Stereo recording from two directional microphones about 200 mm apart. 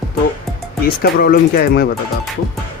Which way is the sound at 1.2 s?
50° left (ahead or behind).